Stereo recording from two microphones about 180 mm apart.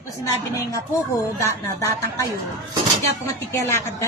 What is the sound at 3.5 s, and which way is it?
Speech, 15° left (ahead or behind).